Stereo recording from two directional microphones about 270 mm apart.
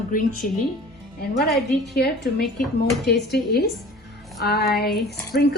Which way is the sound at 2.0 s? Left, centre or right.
Left.